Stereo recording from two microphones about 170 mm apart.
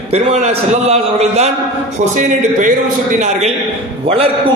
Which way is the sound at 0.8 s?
40° right (ahead or behind).